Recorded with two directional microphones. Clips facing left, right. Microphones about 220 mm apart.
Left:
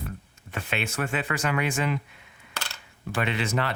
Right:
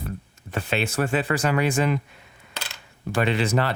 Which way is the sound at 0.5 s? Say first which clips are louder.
Right 5 dB; 35° right (ahead or behind).